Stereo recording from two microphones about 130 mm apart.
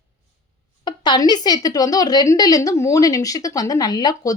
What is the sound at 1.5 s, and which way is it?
Speech, 30° left (ahead or behind).